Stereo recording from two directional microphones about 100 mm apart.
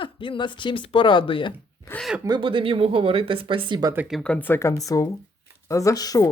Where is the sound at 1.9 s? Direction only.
20° left (ahead or behind).